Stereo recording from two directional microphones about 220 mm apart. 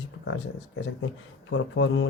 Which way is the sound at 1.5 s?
60° left (ahead or behind).